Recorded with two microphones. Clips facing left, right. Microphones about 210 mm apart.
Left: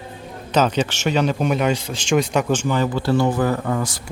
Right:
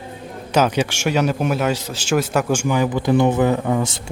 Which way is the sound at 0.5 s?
10° right (ahead or behind).